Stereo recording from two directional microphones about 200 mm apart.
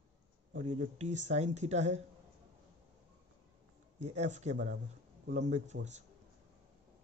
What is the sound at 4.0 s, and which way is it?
Speech, 35° right (ahead or behind).